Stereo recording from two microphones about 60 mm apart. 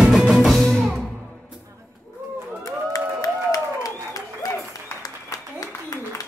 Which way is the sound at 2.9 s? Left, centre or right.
Left.